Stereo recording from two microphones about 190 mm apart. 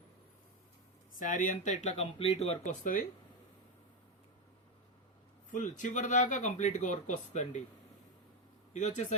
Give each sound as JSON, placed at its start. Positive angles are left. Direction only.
{"t": 1.2, "sound": "speech", "side_deg": 45}
{"t": 5.5, "sound": "speech", "side_deg": 40}
{"t": 8.7, "sound": "speech", "side_deg": 40}